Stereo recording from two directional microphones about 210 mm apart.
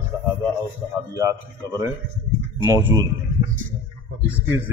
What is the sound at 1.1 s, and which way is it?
A man's voice, 15° right (ahead or behind).